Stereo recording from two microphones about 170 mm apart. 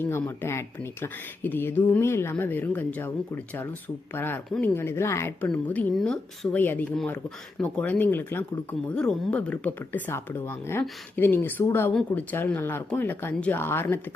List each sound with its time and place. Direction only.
0.0 s speech: 15° left (ahead or behind)